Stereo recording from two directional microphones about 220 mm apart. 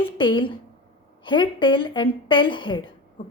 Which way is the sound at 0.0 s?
20° left (ahead or behind).